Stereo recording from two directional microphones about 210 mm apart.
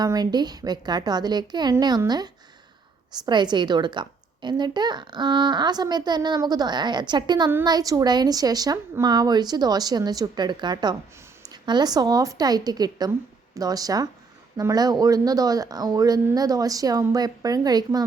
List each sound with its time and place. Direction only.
0.0 s a woman's voice: 20° right (ahead or behind)